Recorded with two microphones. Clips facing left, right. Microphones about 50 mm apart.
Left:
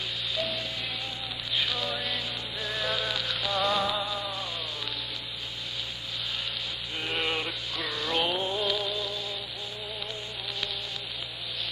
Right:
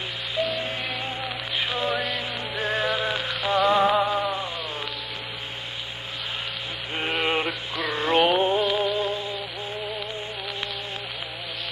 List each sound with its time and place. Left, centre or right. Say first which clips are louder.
0.4 s rain on surface: right 9 dB; right
7.2 s music: right 6 dB; right